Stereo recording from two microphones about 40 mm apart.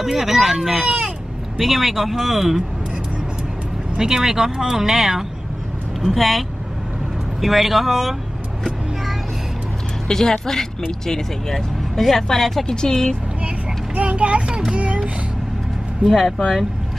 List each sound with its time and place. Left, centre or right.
0.0 s speech: centre
4.0 s speech: centre
6.1 s speech: centre
10.0 s speech: centre
12.6 s speech: centre
13.9 s a sound: right
16.1 s speech: centre